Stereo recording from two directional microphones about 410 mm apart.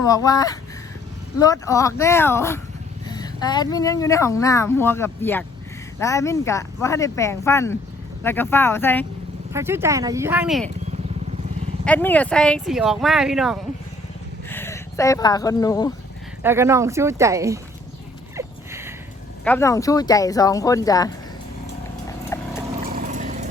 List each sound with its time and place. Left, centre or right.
0.0 s speech: centre
9.5 s speech: centre
11.9 s speech: centre
16.4 s speech: centre
18.3 s a sound: centre
19.5 s speech: centre
22.3 s a sound: centre
22.9 s vehicle: centre